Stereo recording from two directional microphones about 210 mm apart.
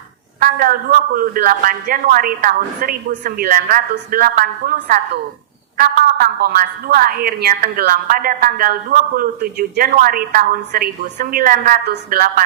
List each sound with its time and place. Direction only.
0.4 s a woman's voice: 45° right (ahead or behind)